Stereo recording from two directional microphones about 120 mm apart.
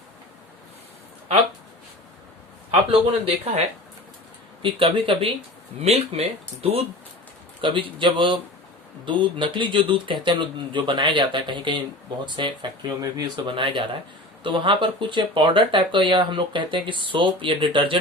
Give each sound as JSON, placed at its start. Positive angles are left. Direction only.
{"t": 2.9, "sound": "speech", "side_deg": -55}
{"t": 4.6, "sound": "speech", "side_deg": -45}
{"t": 7.6, "sound": "speech", "side_deg": -45}